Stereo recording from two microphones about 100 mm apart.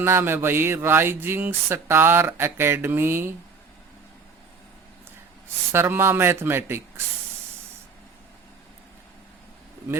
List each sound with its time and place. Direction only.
0.0 s speech: 25° right (ahead or behind)
5.7 s speech: 25° right (ahead or behind)